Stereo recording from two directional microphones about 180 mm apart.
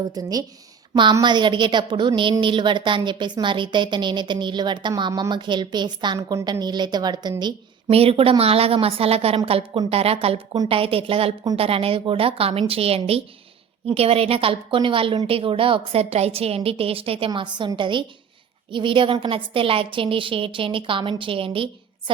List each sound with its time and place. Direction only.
0.1 s a woman's voice: 20° right (ahead or behind)